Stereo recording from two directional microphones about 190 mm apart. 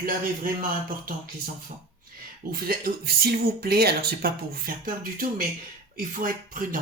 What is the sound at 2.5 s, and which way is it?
Speech, 50° right (ahead or behind).